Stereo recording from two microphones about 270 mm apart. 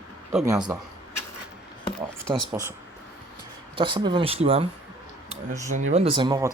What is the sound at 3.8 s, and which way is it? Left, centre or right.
Speech, centre.